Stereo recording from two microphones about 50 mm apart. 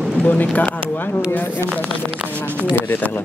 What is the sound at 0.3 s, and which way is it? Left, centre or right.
Speech, left.